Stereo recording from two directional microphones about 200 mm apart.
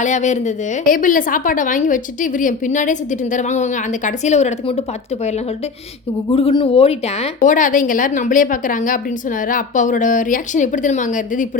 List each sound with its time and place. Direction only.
0.0 s a woman's voice: 35° left (ahead or behind)
6.3 s a woman's voice: 25° left (ahead or behind)